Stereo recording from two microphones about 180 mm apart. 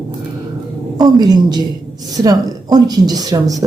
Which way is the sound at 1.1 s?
25° right (ahead or behind).